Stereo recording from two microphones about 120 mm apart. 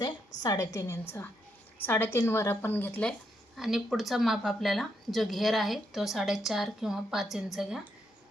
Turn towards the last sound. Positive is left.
turn(degrees=-5)  # may be behind; listen again after turning